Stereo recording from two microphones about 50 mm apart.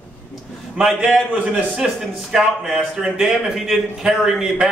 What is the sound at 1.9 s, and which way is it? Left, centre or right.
Speech, centre.